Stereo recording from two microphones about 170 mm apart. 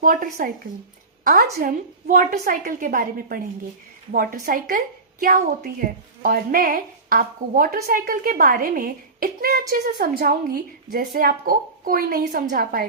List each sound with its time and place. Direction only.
0.0 s a child's voice: 55° right (ahead or behind)